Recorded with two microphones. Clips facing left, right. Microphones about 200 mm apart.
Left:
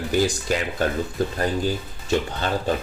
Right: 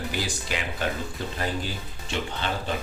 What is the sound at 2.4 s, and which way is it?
Speech, 45° left (ahead or behind).